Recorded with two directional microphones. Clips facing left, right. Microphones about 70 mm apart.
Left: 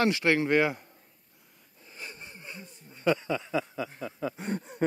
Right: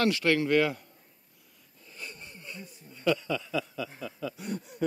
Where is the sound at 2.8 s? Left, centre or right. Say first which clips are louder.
Left 1 dB; left.